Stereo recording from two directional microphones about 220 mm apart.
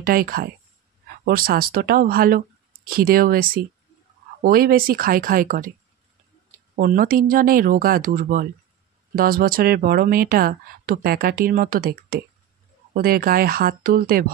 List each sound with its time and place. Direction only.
0.0 s speech: 40° right (ahead or behind)
6.7 s speech: 40° right (ahead or behind)